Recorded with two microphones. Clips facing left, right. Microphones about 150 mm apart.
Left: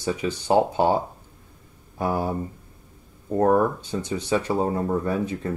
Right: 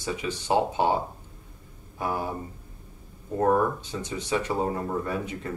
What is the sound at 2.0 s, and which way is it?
Speech, 35° left (ahead or behind).